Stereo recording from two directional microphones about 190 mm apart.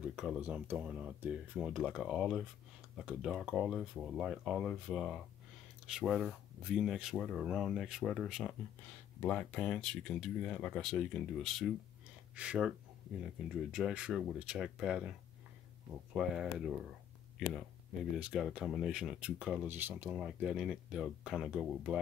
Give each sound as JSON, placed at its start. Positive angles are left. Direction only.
{"t": 0.0, "sound": "speech", "side_deg": -5}
{"t": 18.1, "sound": "speech", "side_deg": 0}